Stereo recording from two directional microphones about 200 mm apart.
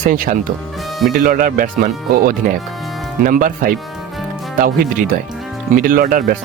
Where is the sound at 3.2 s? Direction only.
45° right (ahead or behind).